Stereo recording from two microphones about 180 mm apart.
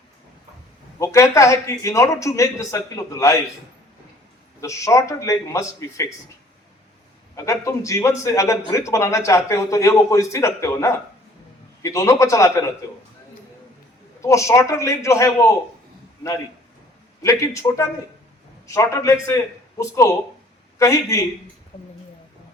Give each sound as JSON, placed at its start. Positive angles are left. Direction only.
{"t": 0.9, "sound": "a man's voice", "side_deg": 15}
{"t": 4.6, "sound": "a man's voice", "side_deg": 15}
{"t": 7.3, "sound": "a man's voice", "side_deg": 15}
{"t": 14.2, "sound": "a man's voice", "side_deg": 15}
{"t": 17.2, "sound": "a man's voice", "side_deg": 15}
{"t": 20.7, "sound": "a man's voice", "side_deg": 15}